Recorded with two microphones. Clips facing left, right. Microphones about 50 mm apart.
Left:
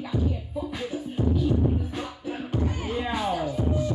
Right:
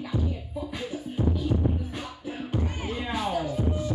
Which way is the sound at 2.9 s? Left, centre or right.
Centre.